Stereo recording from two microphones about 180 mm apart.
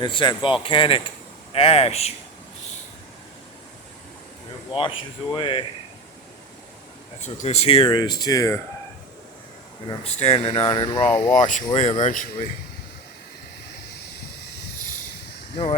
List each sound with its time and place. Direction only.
0.0 s speech: 25° left (ahead or behind)
4.7 s speech: 30° left (ahead or behind)
7.2 s speech: 40° left (ahead or behind); by 8.5 s 20° left (ahead or behind)
10.0 s speech: 35° left (ahead or behind)
11.3 s speech: 45° left (ahead or behind)